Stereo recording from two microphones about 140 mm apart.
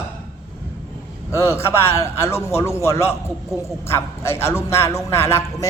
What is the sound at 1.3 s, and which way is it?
A man's voice, 20° left (ahead or behind).